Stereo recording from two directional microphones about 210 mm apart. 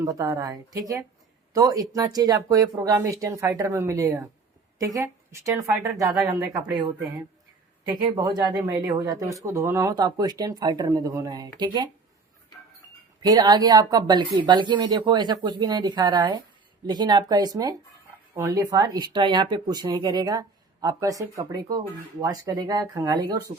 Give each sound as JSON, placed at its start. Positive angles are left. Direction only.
{"t": 0.0, "sound": "speech", "side_deg": -15}
{"t": 8.1, "sound": "speech", "side_deg": -20}
{"t": 13.2, "sound": "speech", "side_deg": -20}